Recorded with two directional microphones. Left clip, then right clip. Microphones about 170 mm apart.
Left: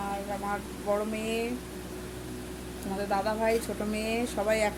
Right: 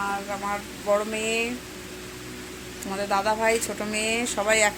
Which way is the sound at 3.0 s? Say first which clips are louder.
Right 5 dB; centre (ahead or behind).